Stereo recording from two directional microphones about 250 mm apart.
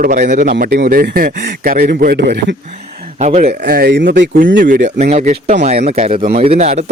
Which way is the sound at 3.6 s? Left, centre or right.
Right.